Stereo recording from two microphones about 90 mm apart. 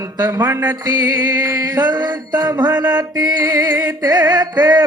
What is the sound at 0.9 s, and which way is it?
Music, 45° right (ahead or behind).